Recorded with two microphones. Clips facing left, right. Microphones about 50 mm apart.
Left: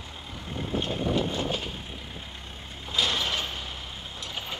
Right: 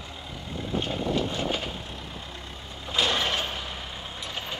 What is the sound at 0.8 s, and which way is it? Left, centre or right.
Vehicle, centre.